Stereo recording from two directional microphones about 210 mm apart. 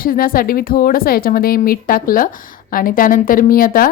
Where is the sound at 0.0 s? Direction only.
45° left (ahead or behind).